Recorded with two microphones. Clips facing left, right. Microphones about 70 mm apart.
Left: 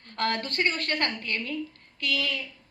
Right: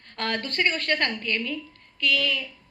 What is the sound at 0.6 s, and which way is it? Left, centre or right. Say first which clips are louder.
Speech: right 3 dB; left.